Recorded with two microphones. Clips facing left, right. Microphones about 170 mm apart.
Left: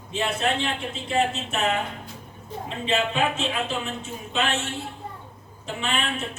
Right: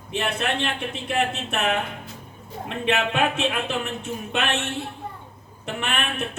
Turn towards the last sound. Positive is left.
turn(degrees=-65)  # may be behind; listen again after turning